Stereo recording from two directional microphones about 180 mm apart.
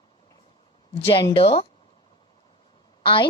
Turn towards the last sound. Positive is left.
turn(degrees=30)  # may be behind; listen again after turning